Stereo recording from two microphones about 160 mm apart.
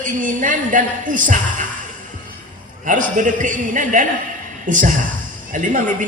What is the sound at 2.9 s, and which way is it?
A man's voice, 55° right (ahead or behind).